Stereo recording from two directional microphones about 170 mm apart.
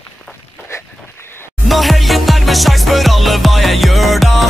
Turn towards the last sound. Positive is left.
turn(degrees=0)  # may be behind; listen again after turning